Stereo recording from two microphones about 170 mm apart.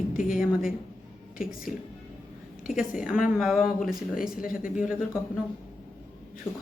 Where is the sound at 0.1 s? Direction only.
55° left (ahead or behind).